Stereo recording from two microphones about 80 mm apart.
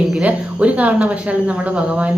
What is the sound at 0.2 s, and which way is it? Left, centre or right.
A woman's voice, centre.